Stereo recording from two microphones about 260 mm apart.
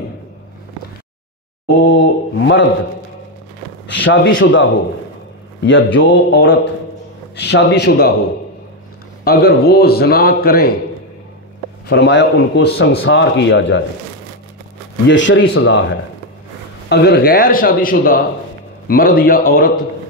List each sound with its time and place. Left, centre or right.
1.7 s a sound: left
3.9 s speech: left
5.9 s a man's voice: left
9.2 s a man's voice: left
11.9 s a man's voice: left
15.0 s a man's voice: left